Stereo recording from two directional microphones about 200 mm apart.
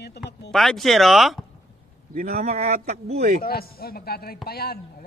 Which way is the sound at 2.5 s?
35° right (ahead or behind).